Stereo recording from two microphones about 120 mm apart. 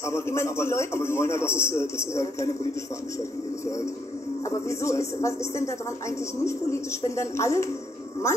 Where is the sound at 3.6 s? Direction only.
25° left (ahead or behind).